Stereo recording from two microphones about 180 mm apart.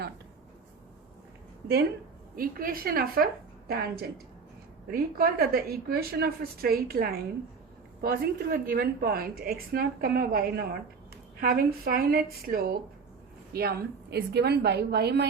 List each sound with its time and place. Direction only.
2.3 s a woman's voice: 55° right (ahead or behind)